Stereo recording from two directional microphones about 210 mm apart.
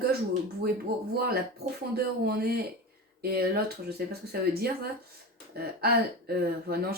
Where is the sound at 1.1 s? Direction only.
45° right (ahead or behind).